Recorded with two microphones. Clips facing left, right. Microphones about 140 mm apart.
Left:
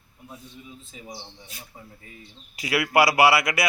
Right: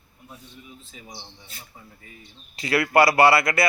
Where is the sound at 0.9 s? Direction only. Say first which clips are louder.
Left 4 dB; 15° left (ahead or behind).